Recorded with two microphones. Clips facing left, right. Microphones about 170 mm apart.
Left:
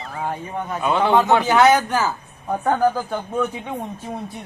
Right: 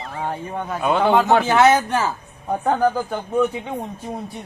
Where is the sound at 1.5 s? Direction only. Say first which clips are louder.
Left 1 dB; 25° right (ahead or behind).